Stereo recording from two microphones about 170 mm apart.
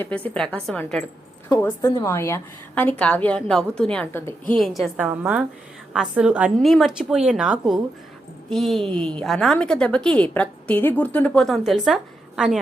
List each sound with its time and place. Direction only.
0.0 s a woman's voice: 10° left (ahead or behind)
1.5 s a woman's voice: 15° left (ahead or behind)
4.5 s a woman's voice: centre (ahead or behind)